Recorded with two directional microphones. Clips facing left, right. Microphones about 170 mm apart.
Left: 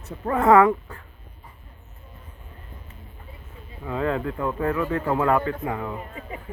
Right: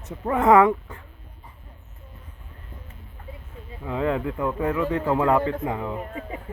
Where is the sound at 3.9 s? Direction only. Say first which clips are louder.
Right 1 dB; 15° right (ahead or behind).